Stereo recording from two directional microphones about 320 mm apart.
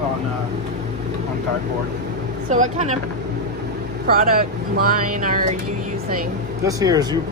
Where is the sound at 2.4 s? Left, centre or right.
Right.